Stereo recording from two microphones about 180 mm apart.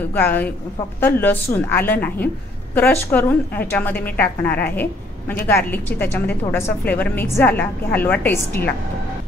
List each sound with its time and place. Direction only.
0.1 s a woman's voice: 10° left (ahead or behind)